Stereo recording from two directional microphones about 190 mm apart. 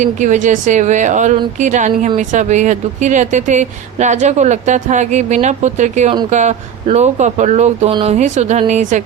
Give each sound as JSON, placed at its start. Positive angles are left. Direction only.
{"t": 0.0, "sound": "speech", "side_deg": -40}